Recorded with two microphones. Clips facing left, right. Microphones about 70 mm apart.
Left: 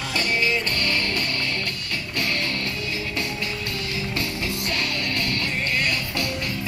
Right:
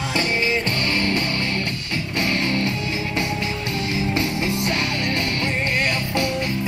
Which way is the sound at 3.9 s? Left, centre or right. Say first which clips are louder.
Right 7 dB; right.